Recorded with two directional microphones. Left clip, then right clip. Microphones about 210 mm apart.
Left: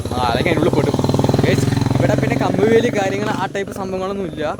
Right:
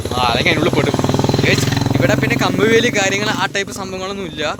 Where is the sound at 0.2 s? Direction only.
15° left (ahead or behind).